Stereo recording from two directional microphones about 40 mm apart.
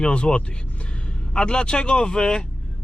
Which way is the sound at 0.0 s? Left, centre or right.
Left.